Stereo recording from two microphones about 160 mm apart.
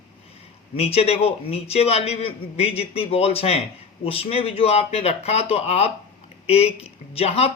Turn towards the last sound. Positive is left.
turn(degrees=40)  # may be behind; listen again after turning